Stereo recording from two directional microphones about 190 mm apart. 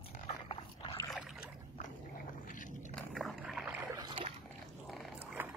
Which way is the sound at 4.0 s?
25° right (ahead or behind).